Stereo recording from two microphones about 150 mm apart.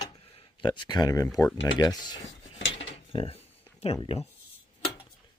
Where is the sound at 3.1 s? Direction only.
40° left (ahead or behind).